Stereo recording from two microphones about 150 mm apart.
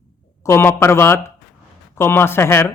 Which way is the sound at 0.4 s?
15° left (ahead or behind).